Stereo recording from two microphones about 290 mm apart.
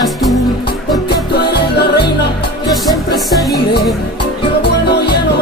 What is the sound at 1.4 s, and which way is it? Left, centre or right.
Music, left.